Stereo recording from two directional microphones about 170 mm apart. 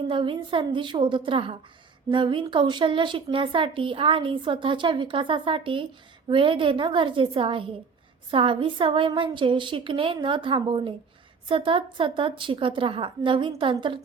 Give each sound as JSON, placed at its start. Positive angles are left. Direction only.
{"t": 0.1, "sound": "a woman's voice", "side_deg": -30}